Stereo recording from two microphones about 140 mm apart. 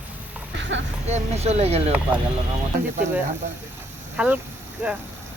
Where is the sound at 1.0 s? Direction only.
50° right (ahead or behind).